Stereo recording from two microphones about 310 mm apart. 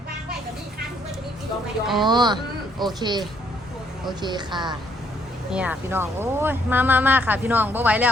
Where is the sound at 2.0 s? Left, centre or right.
Centre.